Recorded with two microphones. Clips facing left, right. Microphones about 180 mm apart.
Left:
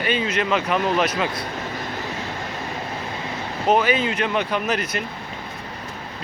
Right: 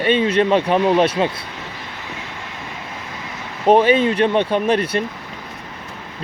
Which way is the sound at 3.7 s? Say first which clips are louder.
Right 6 dB; 30° right (ahead or behind).